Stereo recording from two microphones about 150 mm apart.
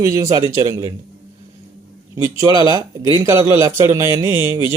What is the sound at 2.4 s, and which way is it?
A man's voice, 25° right (ahead or behind).